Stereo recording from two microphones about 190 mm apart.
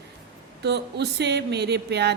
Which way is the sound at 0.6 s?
60° right (ahead or behind).